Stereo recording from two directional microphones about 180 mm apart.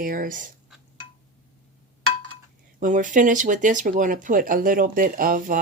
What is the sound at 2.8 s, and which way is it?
Speech, 45° right (ahead or behind).